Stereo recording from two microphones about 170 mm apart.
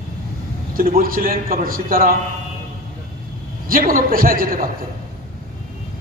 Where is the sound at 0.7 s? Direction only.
60° right (ahead or behind).